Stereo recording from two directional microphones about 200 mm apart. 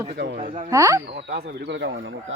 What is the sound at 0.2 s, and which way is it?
Speech, 60° right (ahead or behind).